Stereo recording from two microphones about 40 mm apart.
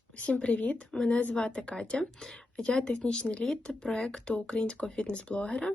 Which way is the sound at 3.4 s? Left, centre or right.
Centre.